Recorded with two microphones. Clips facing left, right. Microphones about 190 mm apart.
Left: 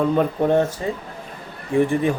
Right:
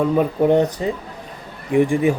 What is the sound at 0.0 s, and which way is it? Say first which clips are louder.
Speech: right 2 dB; 10° right (ahead or behind).